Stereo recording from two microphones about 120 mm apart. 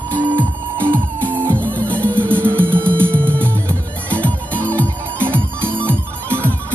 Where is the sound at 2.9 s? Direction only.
20° right (ahead or behind).